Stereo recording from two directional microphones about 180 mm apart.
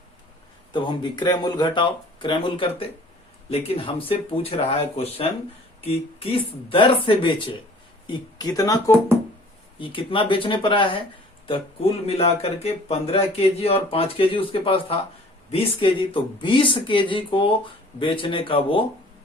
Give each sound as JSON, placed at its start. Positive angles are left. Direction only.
{"t": 0.7, "sound": "speech", "side_deg": 25}